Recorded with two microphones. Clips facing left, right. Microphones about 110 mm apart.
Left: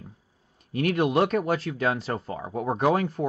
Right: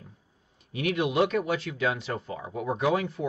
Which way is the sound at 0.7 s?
45° left (ahead or behind).